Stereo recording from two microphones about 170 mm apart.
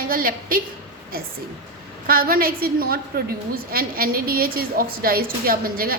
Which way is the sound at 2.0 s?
60° right (ahead or behind).